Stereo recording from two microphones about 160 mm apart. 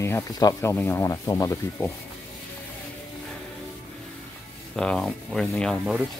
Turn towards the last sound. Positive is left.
turn(degrees=0)  # may be behind; listen again after turning